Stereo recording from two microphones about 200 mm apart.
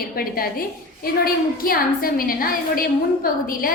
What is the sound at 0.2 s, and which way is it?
A woman's voice, 50° left (ahead or behind).